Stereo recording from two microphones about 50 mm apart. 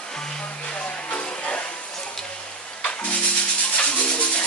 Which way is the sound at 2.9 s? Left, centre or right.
Left.